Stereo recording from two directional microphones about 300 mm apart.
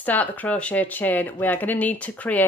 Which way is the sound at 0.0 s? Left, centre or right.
Centre.